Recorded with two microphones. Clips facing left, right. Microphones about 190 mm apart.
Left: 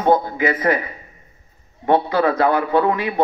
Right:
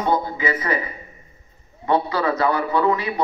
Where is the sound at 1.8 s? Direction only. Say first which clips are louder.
Left 4 dB; 55° left (ahead or behind).